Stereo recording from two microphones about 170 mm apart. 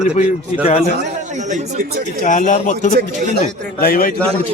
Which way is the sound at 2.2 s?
50° left (ahead or behind).